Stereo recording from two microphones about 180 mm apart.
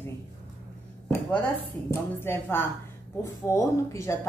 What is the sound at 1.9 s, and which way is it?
A woman's voice, 15° left (ahead or behind).